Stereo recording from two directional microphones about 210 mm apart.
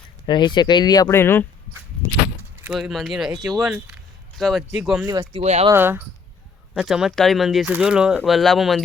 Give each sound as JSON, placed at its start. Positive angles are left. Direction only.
{"t": 0.3, "sound": "speech", "side_deg": 20}
{"t": 2.6, "sound": "speech", "side_deg": 0}
{"t": 5.0, "sound": "speech", "side_deg": -15}
{"t": 5.4, "sound": "speech", "side_deg": -30}
{"t": 5.7, "sound": "speech", "side_deg": -10}